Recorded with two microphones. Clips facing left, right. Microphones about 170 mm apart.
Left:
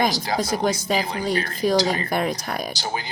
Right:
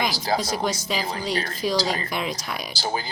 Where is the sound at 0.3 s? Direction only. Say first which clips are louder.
Left 3 dB; 50° left (ahead or behind).